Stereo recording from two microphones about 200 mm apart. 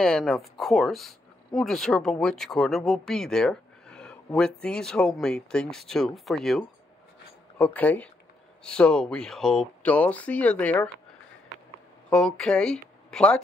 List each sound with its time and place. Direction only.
0.0 s speech: centre (ahead or behind)
12.1 s speech: 5° left (ahead or behind)